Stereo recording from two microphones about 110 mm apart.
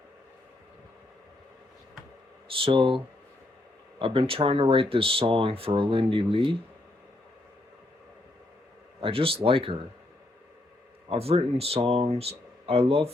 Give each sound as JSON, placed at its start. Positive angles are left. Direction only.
{"t": 2.6, "sound": "speech", "side_deg": -50}
{"t": 9.0, "sound": "speech", "side_deg": -55}
{"t": 11.1, "sound": "speech", "side_deg": -65}